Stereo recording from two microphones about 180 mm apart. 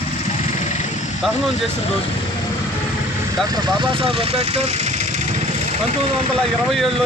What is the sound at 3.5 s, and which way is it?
Speech, 25° right (ahead or behind).